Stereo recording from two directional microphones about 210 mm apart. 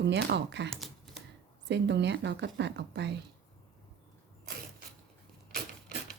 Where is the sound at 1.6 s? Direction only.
55° right (ahead or behind).